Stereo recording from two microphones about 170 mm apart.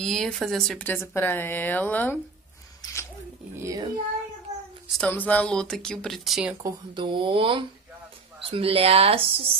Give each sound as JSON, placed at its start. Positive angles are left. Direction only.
{"t": 0.0, "sound": "speech", "side_deg": 0}
{"t": 2.8, "sound": "a sound", "side_deg": 15}
{"t": 3.5, "sound": "child singing", "side_deg": -20}
{"t": 4.9, "sound": "speech", "side_deg": 10}
{"t": 6.6, "sound": "speech", "side_deg": -25}